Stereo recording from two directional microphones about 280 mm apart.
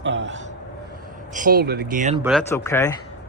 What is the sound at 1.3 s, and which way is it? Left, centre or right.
Speech, right.